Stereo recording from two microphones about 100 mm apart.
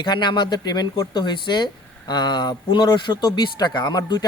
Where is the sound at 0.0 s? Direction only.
50° left (ahead or behind).